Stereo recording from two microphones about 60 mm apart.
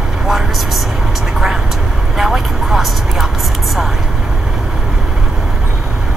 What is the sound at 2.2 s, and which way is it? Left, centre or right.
Vehicle, centre.